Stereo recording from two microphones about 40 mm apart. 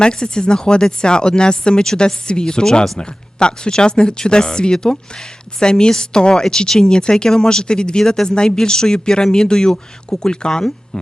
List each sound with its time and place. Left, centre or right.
0.0 s speech: centre